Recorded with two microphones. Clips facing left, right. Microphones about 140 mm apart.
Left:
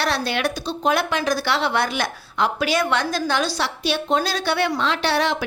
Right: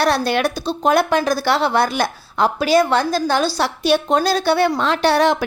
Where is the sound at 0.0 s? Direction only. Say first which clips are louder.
Right 5 dB; 45° right (ahead or behind).